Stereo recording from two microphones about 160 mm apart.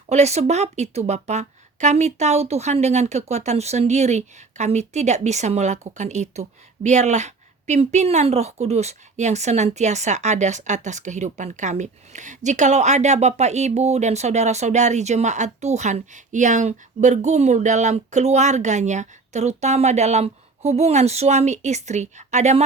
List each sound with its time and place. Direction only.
0.1 s a woman's voice: 45° right (ahead or behind)